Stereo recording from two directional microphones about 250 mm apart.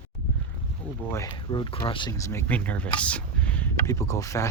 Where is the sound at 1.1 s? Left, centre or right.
Centre.